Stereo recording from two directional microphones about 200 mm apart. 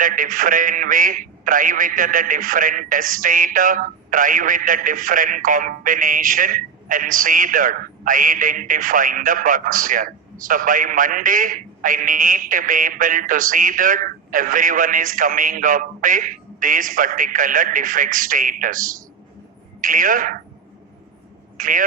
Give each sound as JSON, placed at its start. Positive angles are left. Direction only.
{"t": 0.0, "sound": "a man's voice", "side_deg": -40}
{"t": 21.6, "sound": "a man's voice", "side_deg": -40}